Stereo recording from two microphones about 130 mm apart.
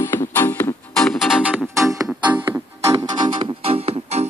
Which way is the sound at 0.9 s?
5° left (ahead or behind).